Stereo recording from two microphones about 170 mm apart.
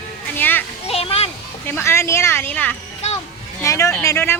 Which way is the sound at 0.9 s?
35° left (ahead or behind).